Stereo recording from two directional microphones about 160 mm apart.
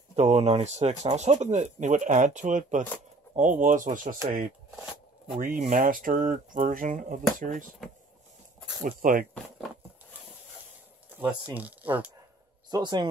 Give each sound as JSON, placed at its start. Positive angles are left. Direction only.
{"t": 0.1, "sound": "speech", "side_deg": -40}
{"t": 8.8, "sound": "speech", "side_deg": -60}
{"t": 11.1, "sound": "speech", "side_deg": -10}
{"t": 12.7, "sound": "a man's voice", "side_deg": -25}